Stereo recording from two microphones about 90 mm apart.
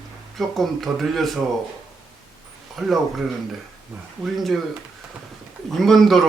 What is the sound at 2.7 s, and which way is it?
Speech, centre (ahead or behind).